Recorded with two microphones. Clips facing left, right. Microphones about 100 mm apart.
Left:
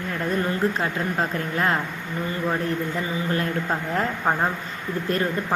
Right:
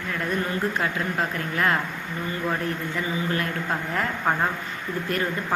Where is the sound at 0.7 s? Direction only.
30° left (ahead or behind).